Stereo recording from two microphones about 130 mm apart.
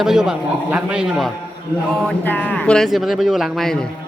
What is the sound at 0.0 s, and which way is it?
A man's voice, 5° right (ahead or behind).